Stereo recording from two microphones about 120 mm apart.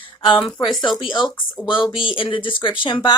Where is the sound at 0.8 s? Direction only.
35° left (ahead or behind).